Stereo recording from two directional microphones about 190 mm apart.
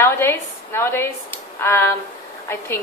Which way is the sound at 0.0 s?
15° left (ahead or behind).